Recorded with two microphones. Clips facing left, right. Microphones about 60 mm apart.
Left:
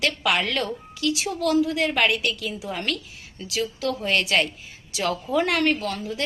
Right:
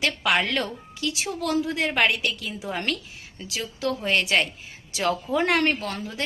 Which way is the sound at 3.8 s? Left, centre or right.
Right.